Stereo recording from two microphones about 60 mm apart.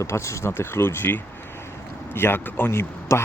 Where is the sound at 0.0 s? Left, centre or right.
Left.